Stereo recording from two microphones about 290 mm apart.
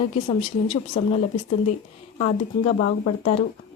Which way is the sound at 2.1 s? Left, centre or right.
Left.